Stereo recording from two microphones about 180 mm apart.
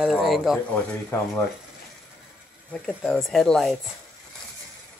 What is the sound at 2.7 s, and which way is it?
Speech, 5° left (ahead or behind).